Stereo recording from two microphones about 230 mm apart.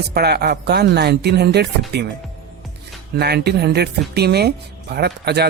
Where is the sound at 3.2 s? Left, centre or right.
Right.